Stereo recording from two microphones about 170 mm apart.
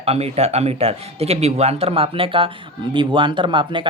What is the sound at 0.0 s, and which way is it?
Speech, 35° right (ahead or behind).